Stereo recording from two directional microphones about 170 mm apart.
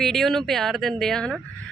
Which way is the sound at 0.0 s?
Centre (ahead or behind).